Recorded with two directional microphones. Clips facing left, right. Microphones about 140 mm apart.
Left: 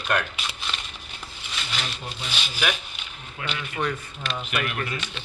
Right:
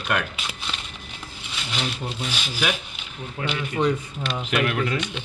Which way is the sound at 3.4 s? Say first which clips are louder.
Right 4 dB; 35° right (ahead or behind).